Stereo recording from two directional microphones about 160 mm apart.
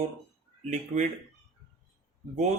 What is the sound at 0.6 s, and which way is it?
Speech, 45° right (ahead or behind).